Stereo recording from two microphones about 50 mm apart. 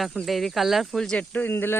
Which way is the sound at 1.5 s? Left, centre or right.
Left.